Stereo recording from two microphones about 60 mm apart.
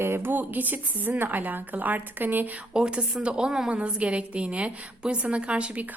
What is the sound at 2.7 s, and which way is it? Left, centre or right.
A woman's voice, centre.